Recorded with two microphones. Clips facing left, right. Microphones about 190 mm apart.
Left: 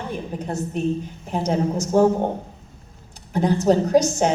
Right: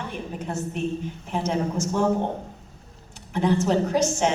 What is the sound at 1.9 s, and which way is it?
Speech, 45° left (ahead or behind).